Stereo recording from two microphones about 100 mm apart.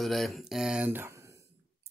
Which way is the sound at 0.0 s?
Centre (ahead or behind).